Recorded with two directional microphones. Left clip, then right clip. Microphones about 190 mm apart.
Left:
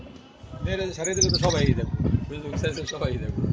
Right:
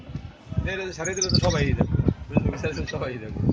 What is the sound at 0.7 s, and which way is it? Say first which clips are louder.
Speech: left 1 dB; 45° left (ahead or behind).